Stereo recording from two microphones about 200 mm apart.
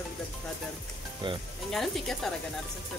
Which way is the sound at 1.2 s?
25° right (ahead or behind).